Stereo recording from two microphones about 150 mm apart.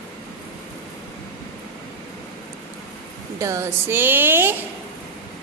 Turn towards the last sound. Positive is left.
turn(degrees=-15)  # may be behind; listen again after turning